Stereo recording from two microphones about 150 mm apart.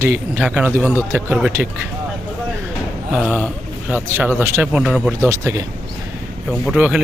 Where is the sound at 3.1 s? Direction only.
5° right (ahead or behind).